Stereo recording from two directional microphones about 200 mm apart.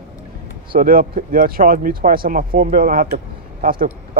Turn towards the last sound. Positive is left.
turn(degrees=-45)  # may be behind; listen again after turning